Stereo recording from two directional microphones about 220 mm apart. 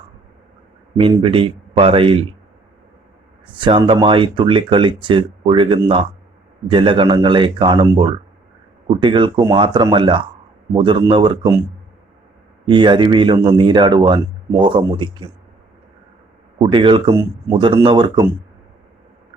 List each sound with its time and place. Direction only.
0.9 s speech: 25° right (ahead or behind)
3.4 s speech: 20° right (ahead or behind)
12.6 s speech: 20° right (ahead or behind)
16.6 s speech: 25° right (ahead or behind)